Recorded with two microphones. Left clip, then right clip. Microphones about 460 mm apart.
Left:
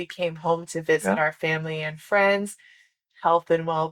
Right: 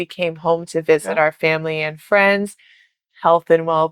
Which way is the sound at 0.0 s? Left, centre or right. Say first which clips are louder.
Right 6 dB; right.